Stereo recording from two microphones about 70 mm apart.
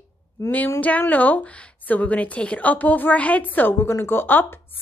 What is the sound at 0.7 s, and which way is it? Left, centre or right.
A woman's voice, left.